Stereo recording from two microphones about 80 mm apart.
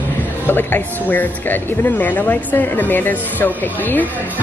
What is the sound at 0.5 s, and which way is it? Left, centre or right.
Speech, left.